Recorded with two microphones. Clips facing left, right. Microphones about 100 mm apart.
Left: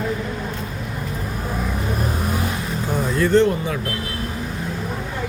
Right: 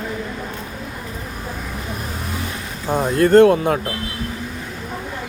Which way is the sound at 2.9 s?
50° right (ahead or behind).